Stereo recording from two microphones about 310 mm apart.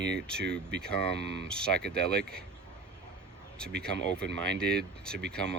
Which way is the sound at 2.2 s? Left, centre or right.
Right.